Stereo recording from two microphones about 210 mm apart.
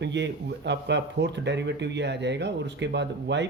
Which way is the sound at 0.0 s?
55° right (ahead or behind).